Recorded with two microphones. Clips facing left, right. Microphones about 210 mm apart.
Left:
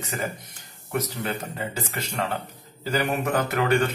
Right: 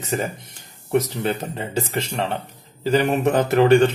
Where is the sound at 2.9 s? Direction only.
25° right (ahead or behind).